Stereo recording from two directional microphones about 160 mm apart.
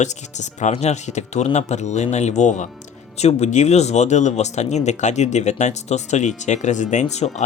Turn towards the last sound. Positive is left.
turn(degrees=50)  # may be behind; listen again after turning